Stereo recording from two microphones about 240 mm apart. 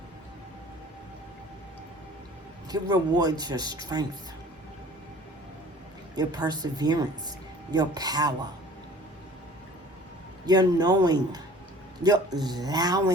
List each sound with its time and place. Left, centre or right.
2.6 s speech: centre
6.1 s speech: centre
10.4 s speech: centre